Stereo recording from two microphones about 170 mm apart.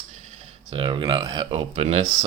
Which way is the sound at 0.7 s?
30° right (ahead or behind).